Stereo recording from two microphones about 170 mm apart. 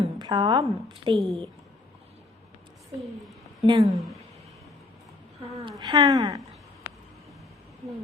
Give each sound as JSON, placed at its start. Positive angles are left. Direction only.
{"t": 0.0, "sound": "a woman's voice", "side_deg": -25}
{"t": 1.1, "sound": "a woman's voice", "side_deg": 0}
{"t": 3.0, "sound": "a sound", "side_deg": 0}
{"t": 3.7, "sound": "a woman's voice", "side_deg": -20}
{"t": 3.9, "sound": "a woman's voice", "side_deg": 0}
{"t": 5.8, "sound": "a woman's voice", "side_deg": -25}